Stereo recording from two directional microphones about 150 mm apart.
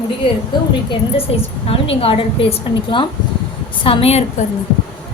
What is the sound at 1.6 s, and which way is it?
A woman's voice, 40° left (ahead or behind).